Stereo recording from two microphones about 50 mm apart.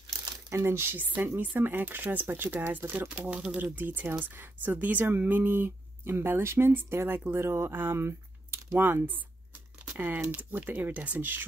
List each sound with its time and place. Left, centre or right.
0.5 s speech: right
0.9 s speech: right
3.1 s speech: right
3.7 s speech: right
7.7 s speech: right
11.1 s speech: right